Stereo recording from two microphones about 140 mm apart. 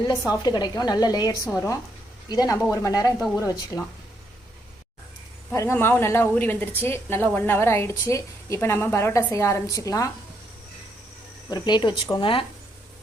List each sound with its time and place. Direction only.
0.1 s a woman's voice: 30° left (ahead or behind)
5.5 s a woman's voice: 15° left (ahead or behind)
11.4 s speech: 30° left (ahead or behind)